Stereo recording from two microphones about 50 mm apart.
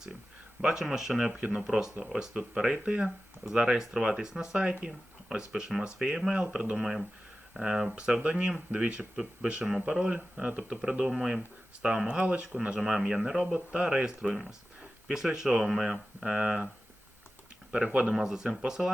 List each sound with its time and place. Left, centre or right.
0.6 s speech: centre
1.3 s speech: right
2.7 s speech: right
5.8 s speech: centre
8.2 s speech: right
10.0 s speech: right
11.1 s speech: centre; by 12.5 s right
12.8 s speech: centre
17.7 s speech: right
18.2 s speech: centre